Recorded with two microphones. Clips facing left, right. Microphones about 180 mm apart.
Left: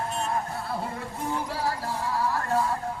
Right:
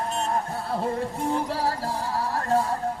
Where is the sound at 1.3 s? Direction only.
30° right (ahead or behind).